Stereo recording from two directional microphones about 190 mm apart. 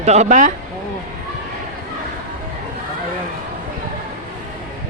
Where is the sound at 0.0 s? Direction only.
35° right (ahead or behind).